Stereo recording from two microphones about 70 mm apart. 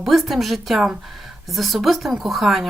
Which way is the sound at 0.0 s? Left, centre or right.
Centre.